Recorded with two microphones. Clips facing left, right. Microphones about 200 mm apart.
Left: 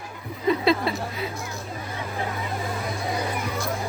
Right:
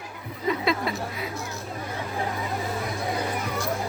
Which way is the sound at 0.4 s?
30° left (ahead or behind).